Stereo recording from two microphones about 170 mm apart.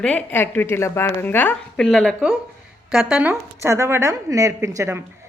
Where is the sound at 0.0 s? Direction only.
10° left (ahead or behind).